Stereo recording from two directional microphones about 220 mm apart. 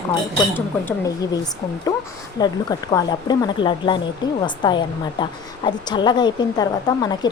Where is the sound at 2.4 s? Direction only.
20° left (ahead or behind).